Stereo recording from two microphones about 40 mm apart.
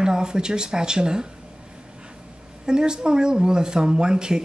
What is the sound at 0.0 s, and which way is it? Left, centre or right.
Speech, centre.